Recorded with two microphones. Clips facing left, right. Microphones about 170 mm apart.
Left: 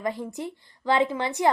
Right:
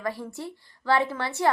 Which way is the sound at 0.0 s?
20° left (ahead or behind).